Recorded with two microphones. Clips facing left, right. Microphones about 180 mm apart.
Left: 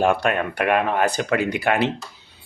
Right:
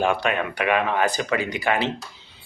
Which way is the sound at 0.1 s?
50° left (ahead or behind).